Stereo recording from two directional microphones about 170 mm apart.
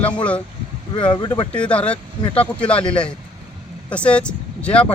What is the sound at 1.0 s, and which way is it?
Speech, 25° left (ahead or behind).